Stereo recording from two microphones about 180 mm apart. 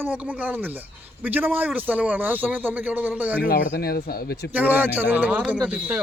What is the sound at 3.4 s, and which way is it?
Speech, 60° left (ahead or behind).